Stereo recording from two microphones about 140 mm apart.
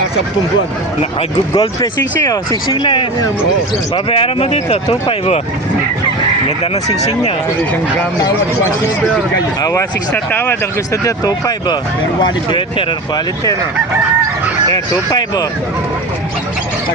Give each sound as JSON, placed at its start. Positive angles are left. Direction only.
{"t": 1.5, "sound": "speech", "side_deg": 25}
{"t": 4.4, "sound": "speech", "side_deg": 50}
{"t": 6.8, "sound": "speech", "side_deg": 50}
{"t": 9.6, "sound": "speech", "side_deg": 25}
{"t": 10.1, "sound": "speech", "side_deg": 15}
{"t": 14.7, "sound": "speech", "side_deg": 30}